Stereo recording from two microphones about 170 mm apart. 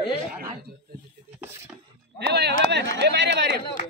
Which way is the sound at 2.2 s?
80° right.